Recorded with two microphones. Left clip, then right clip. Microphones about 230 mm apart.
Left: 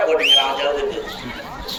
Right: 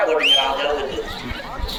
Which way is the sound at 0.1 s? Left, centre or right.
Left.